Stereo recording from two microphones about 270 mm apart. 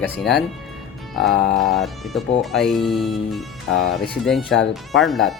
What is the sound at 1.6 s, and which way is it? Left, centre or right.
Speech, centre.